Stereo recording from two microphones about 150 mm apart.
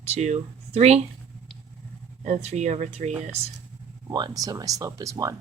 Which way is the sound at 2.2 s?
50° right (ahead or behind).